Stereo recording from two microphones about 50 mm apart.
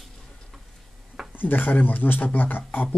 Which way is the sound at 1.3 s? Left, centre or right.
Left.